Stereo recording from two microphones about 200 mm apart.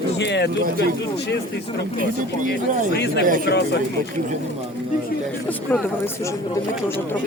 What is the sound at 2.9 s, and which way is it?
Speech, 60° left (ahead or behind).